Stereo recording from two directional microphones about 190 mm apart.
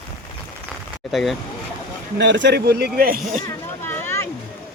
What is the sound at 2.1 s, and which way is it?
A man's voice, 70° right (ahead or behind).